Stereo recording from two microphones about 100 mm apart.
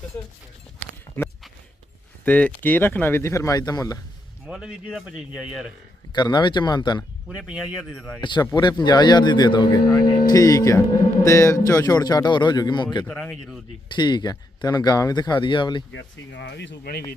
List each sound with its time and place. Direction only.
0.8 s a sound: 20° left (ahead or behind)
2.2 s a man's voice: 15° left (ahead or behind); by 3.9 s 40° left (ahead or behind)
4.4 s speech: 5° right (ahead or behind)
6.1 s speech: 45° left (ahead or behind)
7.3 s speech: 5° right (ahead or behind)
8.2 s speech: 50° left (ahead or behind)
13.1 s speech: 10° left (ahead or behind)
13.9 s speech: 50° left (ahead or behind)